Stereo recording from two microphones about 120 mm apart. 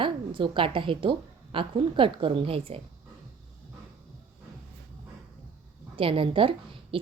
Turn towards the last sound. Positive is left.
turn(degrees=-45)  # may be behind; listen again after turning